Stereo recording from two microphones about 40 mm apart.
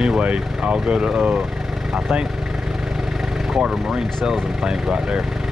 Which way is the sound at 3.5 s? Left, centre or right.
Centre.